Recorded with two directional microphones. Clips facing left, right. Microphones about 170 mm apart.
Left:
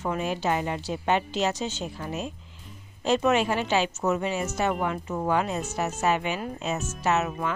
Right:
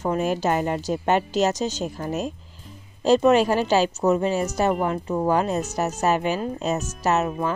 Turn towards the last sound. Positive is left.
turn(degrees=-35)  # may be behind; listen again after turning